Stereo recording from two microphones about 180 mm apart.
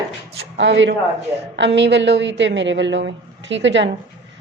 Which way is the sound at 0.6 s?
90° right.